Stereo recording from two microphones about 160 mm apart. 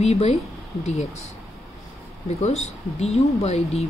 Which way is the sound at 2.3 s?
45° left (ahead or behind).